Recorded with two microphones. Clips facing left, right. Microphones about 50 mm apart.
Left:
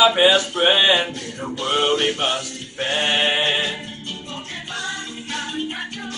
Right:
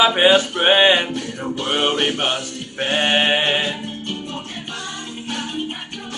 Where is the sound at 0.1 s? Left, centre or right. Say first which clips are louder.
Right 2 dB; right.